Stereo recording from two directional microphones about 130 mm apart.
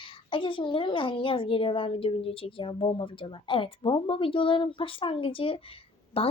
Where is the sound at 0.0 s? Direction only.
40° left (ahead or behind).